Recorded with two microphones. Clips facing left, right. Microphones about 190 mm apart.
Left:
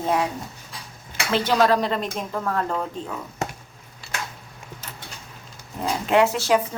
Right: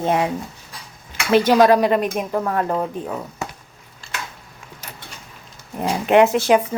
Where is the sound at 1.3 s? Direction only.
15° right (ahead or behind).